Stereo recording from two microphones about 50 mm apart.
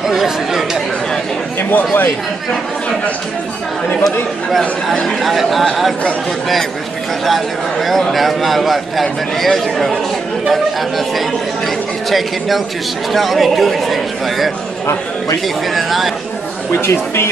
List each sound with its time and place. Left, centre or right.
0.1 s speech: centre
1.6 s speech: left
4.0 s speech: centre
12.1 s speech: centre
15.4 s speech: centre
16.7 s speech: left